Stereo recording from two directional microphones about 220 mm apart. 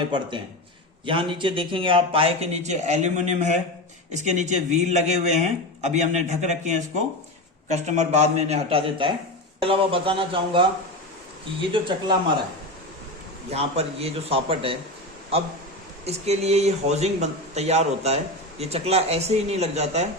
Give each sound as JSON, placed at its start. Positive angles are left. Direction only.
{"t": 0.1, "sound": "a man's voice", "side_deg": -20}
{"t": 11.7, "sound": "speech", "side_deg": -20}
{"t": 13.5, "sound": "speech", "side_deg": -30}
{"t": 16.0, "sound": "speech", "side_deg": -30}